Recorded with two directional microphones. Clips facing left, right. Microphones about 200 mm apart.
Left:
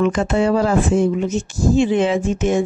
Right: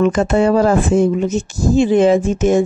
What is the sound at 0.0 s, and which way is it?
A woman's voice, 45° right (ahead or behind).